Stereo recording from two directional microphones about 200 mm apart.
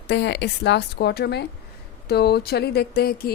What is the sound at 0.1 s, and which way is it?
A woman's voice, 60° left (ahead or behind).